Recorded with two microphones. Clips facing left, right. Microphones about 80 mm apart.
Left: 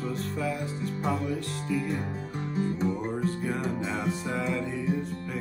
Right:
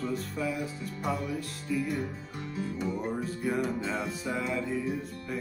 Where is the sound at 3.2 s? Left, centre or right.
Centre.